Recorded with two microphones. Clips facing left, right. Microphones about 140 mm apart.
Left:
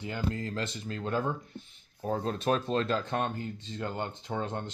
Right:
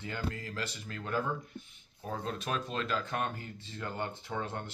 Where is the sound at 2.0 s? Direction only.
35° left (ahead or behind).